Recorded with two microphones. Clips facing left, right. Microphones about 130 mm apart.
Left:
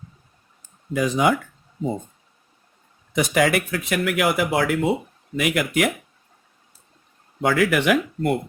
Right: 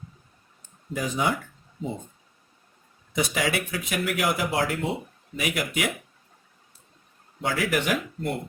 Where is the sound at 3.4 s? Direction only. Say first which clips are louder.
Left 6 dB; 50° left (ahead or behind).